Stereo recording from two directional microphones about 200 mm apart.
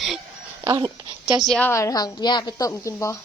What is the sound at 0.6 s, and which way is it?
Speech, 20° right (ahead or behind).